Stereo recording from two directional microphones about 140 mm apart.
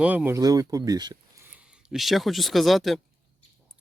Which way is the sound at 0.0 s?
10° right (ahead or behind).